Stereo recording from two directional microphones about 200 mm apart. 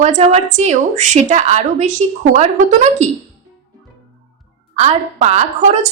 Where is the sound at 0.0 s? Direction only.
35° right (ahead or behind).